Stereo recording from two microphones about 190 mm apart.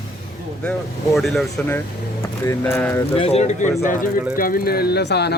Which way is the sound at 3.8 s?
45° left (ahead or behind).